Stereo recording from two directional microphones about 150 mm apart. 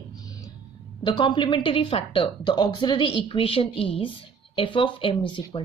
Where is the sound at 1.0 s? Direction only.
30° left (ahead or behind).